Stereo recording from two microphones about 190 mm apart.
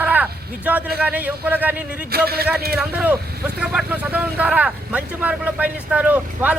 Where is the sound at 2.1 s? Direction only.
55° right (ahead or behind).